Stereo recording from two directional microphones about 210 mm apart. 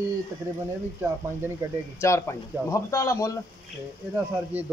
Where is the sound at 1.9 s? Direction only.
15° left (ahead or behind).